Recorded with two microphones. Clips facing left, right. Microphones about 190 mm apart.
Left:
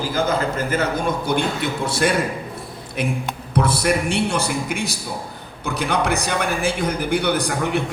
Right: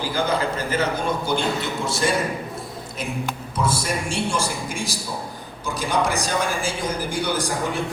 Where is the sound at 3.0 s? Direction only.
65° left (ahead or behind).